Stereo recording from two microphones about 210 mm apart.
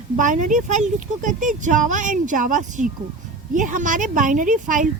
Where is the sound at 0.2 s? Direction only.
40° right (ahead or behind).